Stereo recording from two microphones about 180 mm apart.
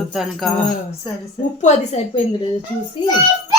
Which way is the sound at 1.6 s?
40° left (ahead or behind).